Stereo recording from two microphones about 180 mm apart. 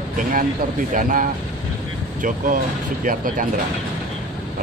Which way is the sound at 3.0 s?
50° right (ahead or behind).